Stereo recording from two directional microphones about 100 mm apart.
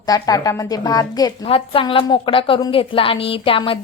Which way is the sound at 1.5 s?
65° left (ahead or behind).